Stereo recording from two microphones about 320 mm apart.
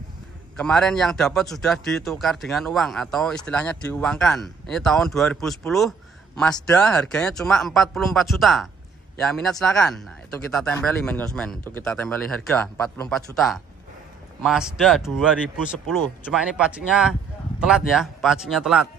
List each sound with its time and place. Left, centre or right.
0.6 s a man's voice: centre
14.4 s a man's voice: centre